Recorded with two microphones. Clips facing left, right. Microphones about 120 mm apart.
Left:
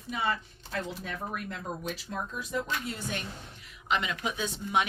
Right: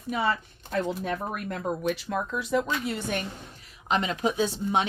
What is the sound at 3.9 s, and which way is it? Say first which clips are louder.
Speech: right 5 dB; 35° right (ahead or behind).